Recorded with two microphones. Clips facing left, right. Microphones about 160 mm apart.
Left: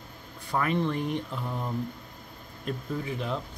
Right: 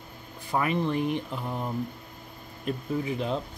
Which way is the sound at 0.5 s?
15° right (ahead or behind).